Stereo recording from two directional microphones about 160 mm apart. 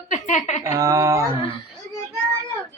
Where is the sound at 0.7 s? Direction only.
20° right (ahead or behind).